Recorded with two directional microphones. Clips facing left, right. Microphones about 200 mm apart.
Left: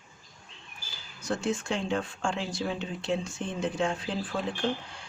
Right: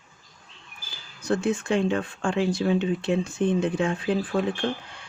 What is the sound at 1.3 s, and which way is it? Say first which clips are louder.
Speech: right 6 dB; 55° right (ahead or behind).